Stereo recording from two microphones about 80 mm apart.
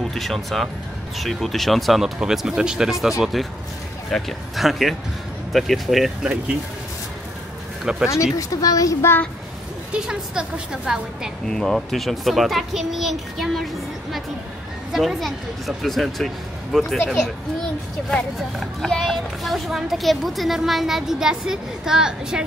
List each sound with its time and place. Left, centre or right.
0.1 s speech: centre
7.8 s speech: centre
8.4 s a woman's voice: left
9.9 s a woman's voice: centre
11.4 s speech: centre
14.9 s speech: centre
18.6 s speech: centre